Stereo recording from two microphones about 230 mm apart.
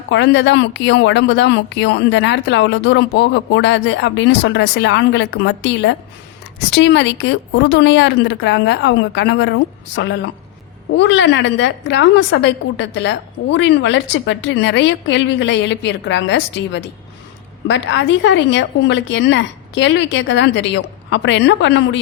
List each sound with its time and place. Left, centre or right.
0.1 s a woman's voice: left